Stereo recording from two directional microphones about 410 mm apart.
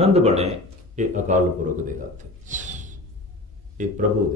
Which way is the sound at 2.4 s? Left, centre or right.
Centre.